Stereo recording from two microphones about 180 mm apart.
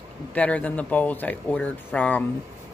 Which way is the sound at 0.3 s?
10° left (ahead or behind).